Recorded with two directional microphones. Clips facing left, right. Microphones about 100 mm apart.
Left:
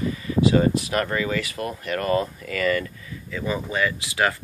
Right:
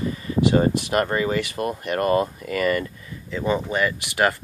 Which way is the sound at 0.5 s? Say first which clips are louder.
Right 1 dB; 30° right (ahead or behind).